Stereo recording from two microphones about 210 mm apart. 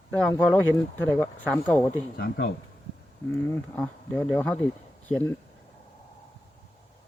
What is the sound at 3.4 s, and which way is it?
Speech, 5° left (ahead or behind).